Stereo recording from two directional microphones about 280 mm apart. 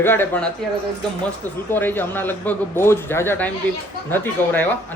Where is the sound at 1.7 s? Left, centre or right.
Centre.